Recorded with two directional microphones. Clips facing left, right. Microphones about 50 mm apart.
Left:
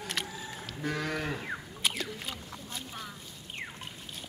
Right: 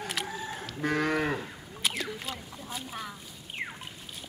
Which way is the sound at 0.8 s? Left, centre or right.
Right.